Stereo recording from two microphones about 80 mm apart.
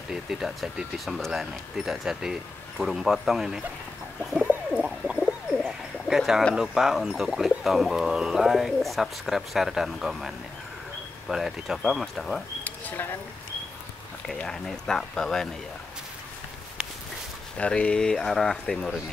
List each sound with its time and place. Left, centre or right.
0.1 s speech: centre
4.4 s bird: centre
5.7 s a sound: centre
6.5 s speech: centre
12.6 s a sound: left
14.4 s speech: centre
17.6 s speech: centre